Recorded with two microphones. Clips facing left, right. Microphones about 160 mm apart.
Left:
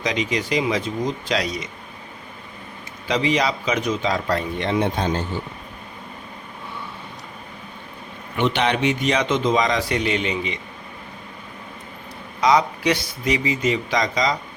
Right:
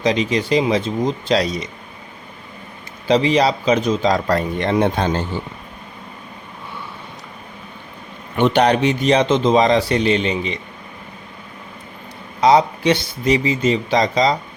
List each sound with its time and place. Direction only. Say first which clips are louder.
0.0 s speech: right 5 dB; 30° right (ahead or behind)
3.1 s speech: right 6 dB; 30° right (ahead or behind); by 5.1 s 60° right (ahead or behind)
8.4 s speech: right 6 dB; 40° right (ahead or behind)
12.4 s speech: right 4 dB; 30° right (ahead or behind)